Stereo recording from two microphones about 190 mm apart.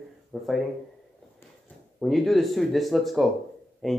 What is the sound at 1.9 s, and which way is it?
Speech, centre (ahead or behind).